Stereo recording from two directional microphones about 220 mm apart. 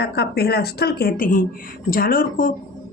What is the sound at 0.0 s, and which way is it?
Speech, 45° left (ahead or behind).